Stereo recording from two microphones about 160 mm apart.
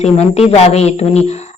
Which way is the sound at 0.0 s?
40° left (ahead or behind).